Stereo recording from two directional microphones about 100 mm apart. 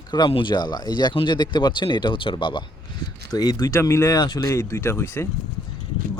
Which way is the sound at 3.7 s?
30° left (ahead or behind).